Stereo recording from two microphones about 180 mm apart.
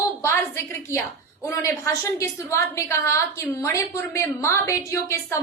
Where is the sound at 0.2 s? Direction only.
15° left (ahead or behind).